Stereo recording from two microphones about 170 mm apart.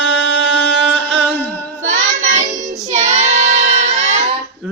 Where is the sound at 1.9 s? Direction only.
45° right (ahead or behind).